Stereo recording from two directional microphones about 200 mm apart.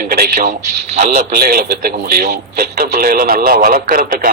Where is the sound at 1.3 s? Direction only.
50° right (ahead or behind).